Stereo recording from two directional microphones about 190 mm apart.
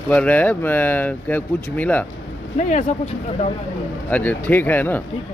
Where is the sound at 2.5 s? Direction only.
35° left (ahead or behind).